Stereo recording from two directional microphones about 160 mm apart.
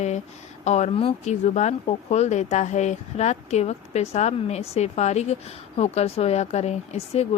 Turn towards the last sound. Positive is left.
turn(degrees=40)  # may be behind; listen again after turning